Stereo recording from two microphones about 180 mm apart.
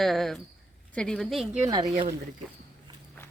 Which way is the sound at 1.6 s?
20° right (ahead or behind).